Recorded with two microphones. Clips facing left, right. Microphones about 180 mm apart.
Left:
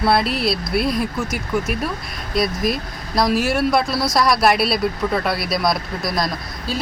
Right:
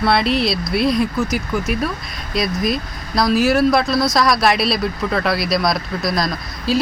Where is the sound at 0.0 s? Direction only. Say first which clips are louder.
Right 1 dB; 5° left (ahead or behind).